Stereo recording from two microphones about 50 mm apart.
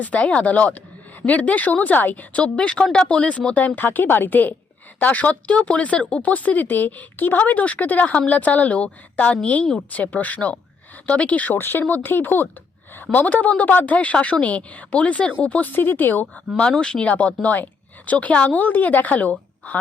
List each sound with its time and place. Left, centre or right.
0.0 s a woman's voice: left
2.3 s a woman's voice: left
6.3 s a woman's voice: left
11.5 s speech: left
11.9 s a woman's voice: left
16.7 s a woman's voice: centre